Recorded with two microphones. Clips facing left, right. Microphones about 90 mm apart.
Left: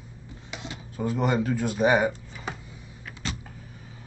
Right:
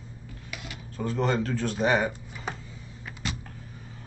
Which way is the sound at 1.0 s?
15° left (ahead or behind).